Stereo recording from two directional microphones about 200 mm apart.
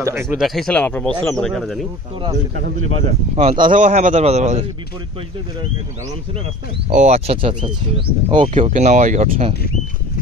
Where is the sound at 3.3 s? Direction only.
25° right (ahead or behind).